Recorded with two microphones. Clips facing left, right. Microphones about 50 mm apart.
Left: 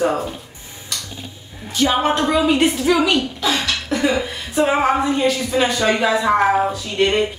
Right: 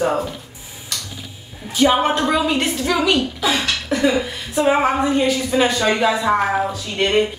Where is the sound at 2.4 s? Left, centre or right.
Centre.